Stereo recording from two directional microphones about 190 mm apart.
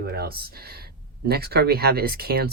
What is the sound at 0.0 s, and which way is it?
Speech, 55° right (ahead or behind).